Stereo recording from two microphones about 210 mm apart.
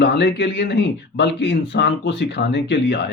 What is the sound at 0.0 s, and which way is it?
Speech, 55° left (ahead or behind).